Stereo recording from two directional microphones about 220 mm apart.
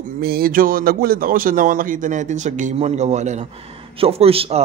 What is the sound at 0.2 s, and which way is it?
Speech, 45° right (ahead or behind).